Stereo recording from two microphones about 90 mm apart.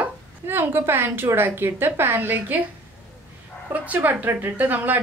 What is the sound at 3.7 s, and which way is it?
A woman's voice, 20° right (ahead or behind).